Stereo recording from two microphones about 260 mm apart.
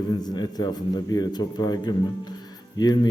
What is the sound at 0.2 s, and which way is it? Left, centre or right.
A man's voice, centre.